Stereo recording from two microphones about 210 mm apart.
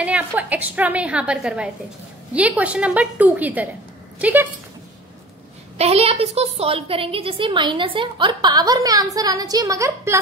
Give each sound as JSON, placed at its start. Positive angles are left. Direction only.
{"t": 0.0, "sound": "a woman's voice", "side_deg": -5}
{"t": 5.8, "sound": "a woman's voice", "side_deg": -30}